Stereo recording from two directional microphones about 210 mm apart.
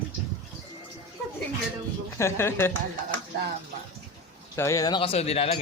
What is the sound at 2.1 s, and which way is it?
Speech, 10° left (ahead or behind).